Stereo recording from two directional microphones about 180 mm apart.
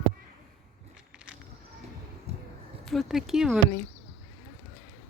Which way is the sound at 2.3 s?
35° right (ahead or behind).